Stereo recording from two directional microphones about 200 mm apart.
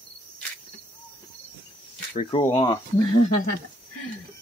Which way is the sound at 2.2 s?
25° left (ahead or behind).